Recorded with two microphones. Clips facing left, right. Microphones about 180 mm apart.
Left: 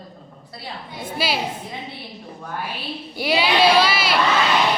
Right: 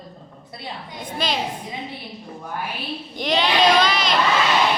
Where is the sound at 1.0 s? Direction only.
5° left (ahead or behind).